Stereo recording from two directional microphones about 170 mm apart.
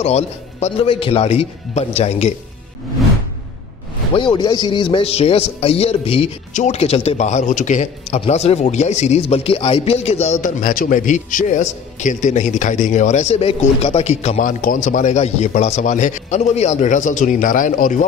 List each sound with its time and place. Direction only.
0.0 s a man's voice: 40° left (ahead or behind)
4.1 s a man's voice: 30° left (ahead or behind)
14.6 s a man's voice: 50° left (ahead or behind)